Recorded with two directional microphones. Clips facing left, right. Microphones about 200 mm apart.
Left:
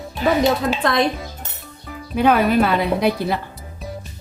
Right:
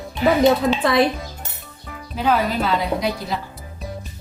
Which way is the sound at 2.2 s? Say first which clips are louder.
Left 5 dB; 60° left (ahead or behind).